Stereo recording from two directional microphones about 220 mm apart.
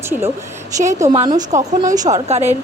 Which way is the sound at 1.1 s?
25° right (ahead or behind).